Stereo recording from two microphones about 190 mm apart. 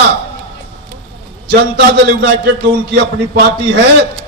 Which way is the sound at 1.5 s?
65° right (ahead or behind).